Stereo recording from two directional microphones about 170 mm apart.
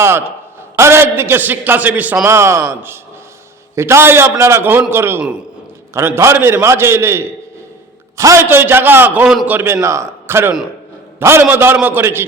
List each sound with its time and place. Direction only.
0.0 s a man's voice: 15° right (ahead or behind)